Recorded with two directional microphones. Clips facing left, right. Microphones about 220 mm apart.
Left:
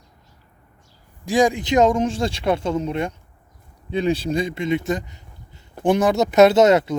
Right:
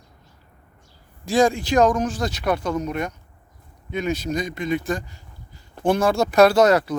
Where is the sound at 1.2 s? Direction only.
15° left (ahead or behind).